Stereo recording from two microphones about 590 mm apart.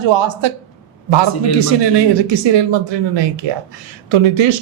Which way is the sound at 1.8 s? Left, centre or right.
Right.